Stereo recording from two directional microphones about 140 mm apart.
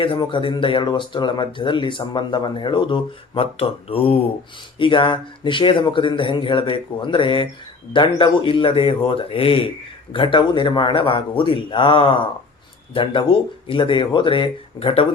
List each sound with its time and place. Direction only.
0.0 s speech: 35° left (ahead or behind)